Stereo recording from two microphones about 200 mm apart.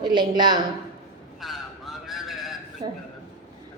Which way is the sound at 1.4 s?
Centre (ahead or behind).